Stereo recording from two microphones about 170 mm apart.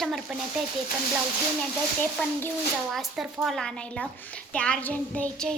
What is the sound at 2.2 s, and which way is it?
A child's voice, 5° left (ahead or behind).